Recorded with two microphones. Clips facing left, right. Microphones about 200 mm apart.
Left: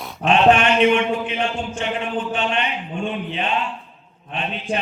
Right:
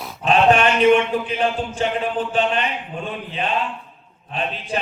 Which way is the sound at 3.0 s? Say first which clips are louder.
Left 4 dB; 40° right (ahead or behind).